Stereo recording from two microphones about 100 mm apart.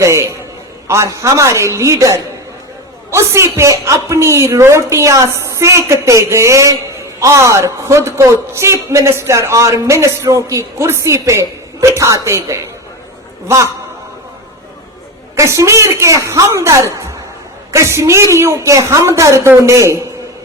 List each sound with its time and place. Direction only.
0.0 s a sound: 30° right (ahead or behind)
0.9 s a woman's voice: 30° right (ahead or behind)
15.4 s a woman's voice: 30° right (ahead or behind)